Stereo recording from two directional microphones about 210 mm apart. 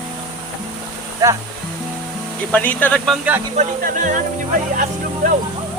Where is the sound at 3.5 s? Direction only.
35° right (ahead or behind).